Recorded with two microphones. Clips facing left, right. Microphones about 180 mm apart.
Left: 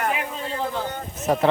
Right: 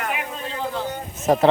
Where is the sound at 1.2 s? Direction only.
45° right (ahead or behind).